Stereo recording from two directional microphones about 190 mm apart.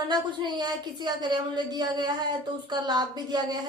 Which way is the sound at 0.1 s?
20° right (ahead or behind).